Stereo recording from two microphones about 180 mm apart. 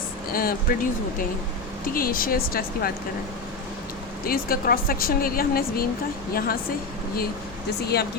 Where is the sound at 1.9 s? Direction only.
55° left (ahead or behind).